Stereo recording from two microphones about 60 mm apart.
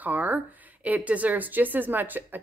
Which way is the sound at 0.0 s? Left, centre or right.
Right.